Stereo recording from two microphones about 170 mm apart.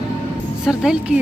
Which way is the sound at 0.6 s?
5° right (ahead or behind).